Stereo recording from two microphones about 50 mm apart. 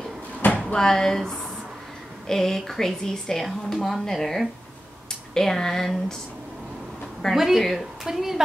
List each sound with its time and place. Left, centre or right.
0.4 s drawer open or close: left
0.7 s speech: centre
7.3 s speech: centre